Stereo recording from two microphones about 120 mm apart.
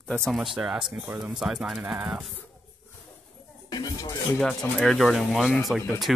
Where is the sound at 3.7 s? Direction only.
30° left (ahead or behind).